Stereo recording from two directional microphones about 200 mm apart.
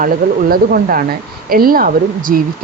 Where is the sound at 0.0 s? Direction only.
45° right (ahead or behind).